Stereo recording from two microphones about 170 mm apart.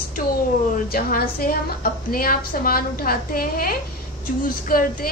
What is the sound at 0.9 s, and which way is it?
A woman's voice, 60° left (ahead or behind).